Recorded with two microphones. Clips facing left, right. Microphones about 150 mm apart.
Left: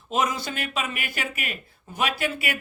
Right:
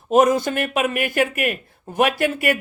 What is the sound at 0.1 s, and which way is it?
Speech, 50° right (ahead or behind).